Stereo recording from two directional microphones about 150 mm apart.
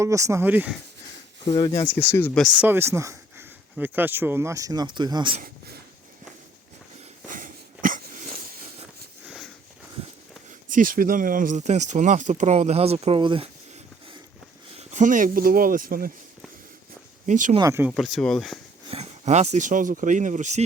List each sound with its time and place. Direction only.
0.0 s speech: 20° right (ahead or behind)
1.9 s speech: 15° left (ahead or behind)
2.3 s speech: centre (ahead or behind)
2.6 s speech: 15° right (ahead or behind)
7.3 s a sound: 65° right (ahead or behind)
9.2 s sniff: 5° right (ahead or behind)
10.7 s speech: 65° right (ahead or behind); by 13.5 s 35° right (ahead or behind)
14.8 s speech: 55° right (ahead or behind); by 16.1 s 70° right (ahead or behind)
17.2 s speech: 55° right (ahead or behind)
17.6 s speech: 15° right (ahead or behind)
17.9 s speech: centre (ahead or behind)
18.9 s speech: 45° right (ahead or behind)